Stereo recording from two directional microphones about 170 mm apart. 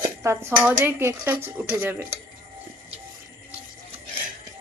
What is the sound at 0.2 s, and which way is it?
Speech, 15° right (ahead or behind).